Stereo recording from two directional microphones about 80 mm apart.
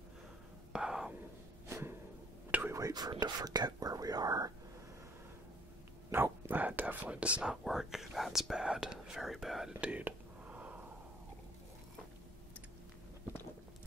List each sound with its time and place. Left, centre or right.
0.7 s whispering: centre
1.7 s a sound: right
2.5 s whispering: centre
2.9 s speech: right
6.1 s whispering: right
7.6 s speech: centre
9.8 s whispering: centre